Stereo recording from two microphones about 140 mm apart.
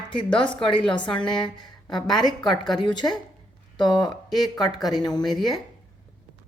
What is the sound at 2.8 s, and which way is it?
Speech, 35° left (ahead or behind).